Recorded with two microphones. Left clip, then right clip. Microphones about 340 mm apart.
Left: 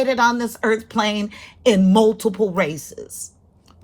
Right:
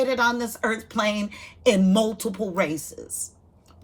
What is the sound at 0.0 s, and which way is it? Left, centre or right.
A woman's voice, centre.